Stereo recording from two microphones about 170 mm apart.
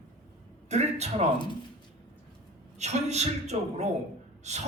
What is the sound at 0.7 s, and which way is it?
Speech, 40° right (ahead or behind).